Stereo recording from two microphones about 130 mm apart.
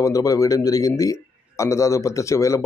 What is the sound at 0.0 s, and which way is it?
A man's voice, 25° left (ahead or behind).